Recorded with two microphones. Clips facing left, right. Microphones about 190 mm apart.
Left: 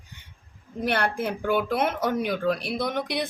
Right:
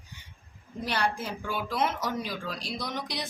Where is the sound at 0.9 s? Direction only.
60° left (ahead or behind).